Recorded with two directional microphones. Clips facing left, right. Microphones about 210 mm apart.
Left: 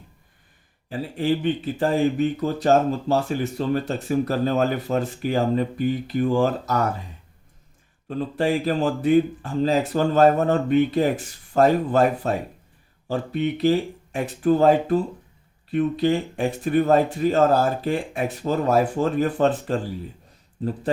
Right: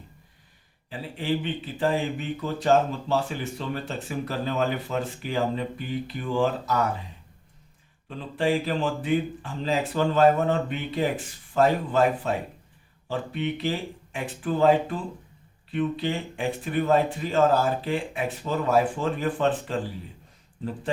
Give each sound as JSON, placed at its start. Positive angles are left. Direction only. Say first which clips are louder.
{"t": 0.9, "sound": "speech", "louder": "left 5 dB", "side_deg": 45}
{"t": 8.0, "sound": "speech", "louder": "left 3 dB", "side_deg": 45}